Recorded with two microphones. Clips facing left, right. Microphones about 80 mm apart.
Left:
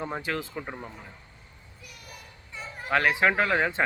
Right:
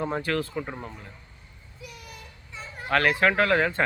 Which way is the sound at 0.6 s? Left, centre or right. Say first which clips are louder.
Right 2 dB; centre.